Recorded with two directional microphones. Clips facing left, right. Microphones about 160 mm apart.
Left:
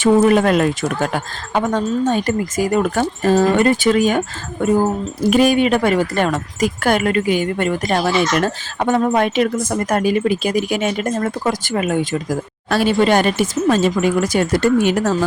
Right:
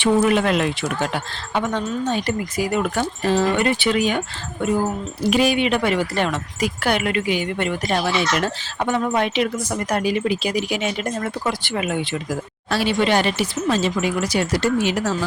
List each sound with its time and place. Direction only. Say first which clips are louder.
0.0 s speech: left 5 dB; 45° left (ahead or behind)